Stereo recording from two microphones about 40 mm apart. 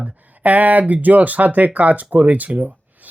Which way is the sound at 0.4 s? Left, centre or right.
Right.